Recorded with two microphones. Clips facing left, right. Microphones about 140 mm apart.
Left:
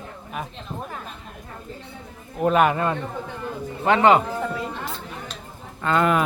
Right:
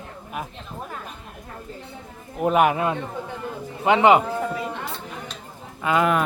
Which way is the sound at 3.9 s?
15° right (ahead or behind).